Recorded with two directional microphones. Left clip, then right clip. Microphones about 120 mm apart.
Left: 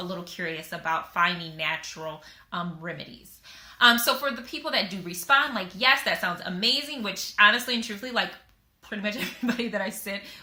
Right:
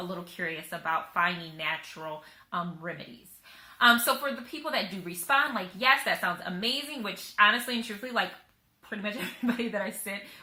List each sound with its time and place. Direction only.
0.3 s a woman's voice: 20° left (ahead or behind)